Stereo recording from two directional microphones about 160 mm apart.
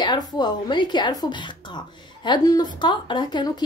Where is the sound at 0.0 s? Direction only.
25° left (ahead or behind).